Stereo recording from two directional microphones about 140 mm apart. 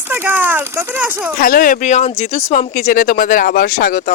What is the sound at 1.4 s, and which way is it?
Speech, 80° left.